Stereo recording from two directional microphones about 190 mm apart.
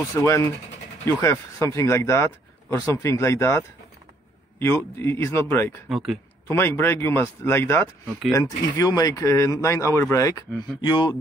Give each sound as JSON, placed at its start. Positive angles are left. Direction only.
{"t": 0.1, "sound": "speech", "side_deg": 15}
{"t": 5.9, "sound": "speech", "side_deg": 0}
{"t": 6.5, "sound": "speech", "side_deg": 10}